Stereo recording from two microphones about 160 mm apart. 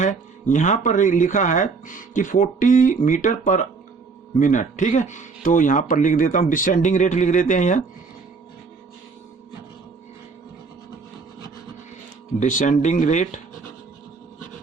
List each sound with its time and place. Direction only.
0.0 s speech: 50° left (ahead or behind)
12.4 s speech: 50° left (ahead or behind)